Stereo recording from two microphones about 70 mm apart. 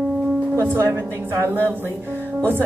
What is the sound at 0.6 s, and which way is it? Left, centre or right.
Speech, right.